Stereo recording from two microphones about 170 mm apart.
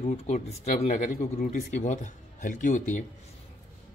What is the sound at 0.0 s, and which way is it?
Speech, 40° left (ahead or behind).